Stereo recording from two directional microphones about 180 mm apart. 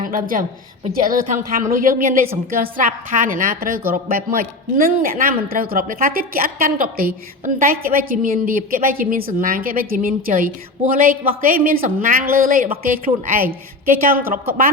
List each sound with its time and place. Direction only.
0.0 s a woman's voice: 50° right (ahead or behind)